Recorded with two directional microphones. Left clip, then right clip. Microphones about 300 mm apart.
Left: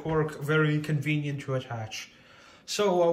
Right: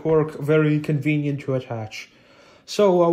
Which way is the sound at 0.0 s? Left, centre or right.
Centre.